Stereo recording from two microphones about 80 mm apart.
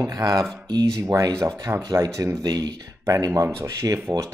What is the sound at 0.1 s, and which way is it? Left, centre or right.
Speech, right.